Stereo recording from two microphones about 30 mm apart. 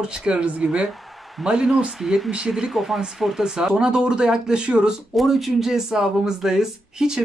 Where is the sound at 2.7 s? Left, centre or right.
Centre.